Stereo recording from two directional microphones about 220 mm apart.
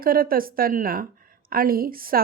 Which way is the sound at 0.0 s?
40° right (ahead or behind).